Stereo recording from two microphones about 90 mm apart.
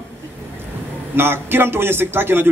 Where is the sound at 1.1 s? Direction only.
25° right (ahead or behind).